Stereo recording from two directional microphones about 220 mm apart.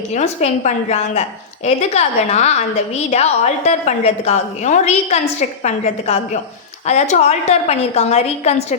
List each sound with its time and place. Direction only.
0.1 s a woman's voice: 30° left (ahead or behind)